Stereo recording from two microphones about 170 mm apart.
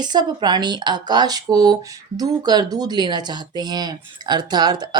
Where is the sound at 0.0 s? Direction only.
25° right (ahead or behind).